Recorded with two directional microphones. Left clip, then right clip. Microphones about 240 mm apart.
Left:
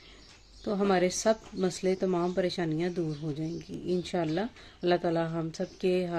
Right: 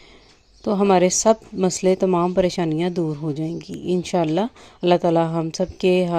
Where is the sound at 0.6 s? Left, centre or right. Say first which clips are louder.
Right 10 dB; right.